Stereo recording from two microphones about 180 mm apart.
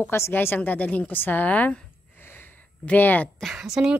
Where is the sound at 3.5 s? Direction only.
5° right (ahead or behind).